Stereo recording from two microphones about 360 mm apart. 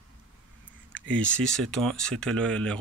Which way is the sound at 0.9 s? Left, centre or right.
Centre.